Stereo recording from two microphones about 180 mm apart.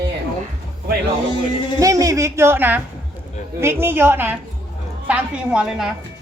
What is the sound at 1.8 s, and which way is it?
A woman's voice, 20° right (ahead or behind).